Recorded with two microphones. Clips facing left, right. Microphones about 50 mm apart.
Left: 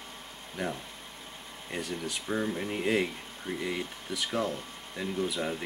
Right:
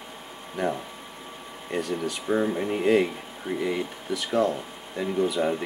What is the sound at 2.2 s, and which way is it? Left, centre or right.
Speech, centre.